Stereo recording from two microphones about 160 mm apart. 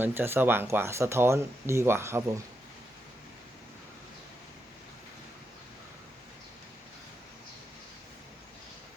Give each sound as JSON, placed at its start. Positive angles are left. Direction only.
{"t": 0.0, "sound": "speech", "side_deg": -15}